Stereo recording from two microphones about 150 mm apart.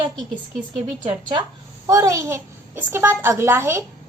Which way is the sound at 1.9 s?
20° right (ahead or behind).